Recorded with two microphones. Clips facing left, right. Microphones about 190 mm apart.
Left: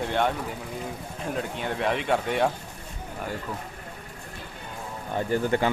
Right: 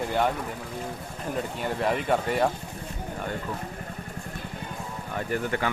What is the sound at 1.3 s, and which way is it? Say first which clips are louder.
Speech: right 1 dB; centre (ahead or behind).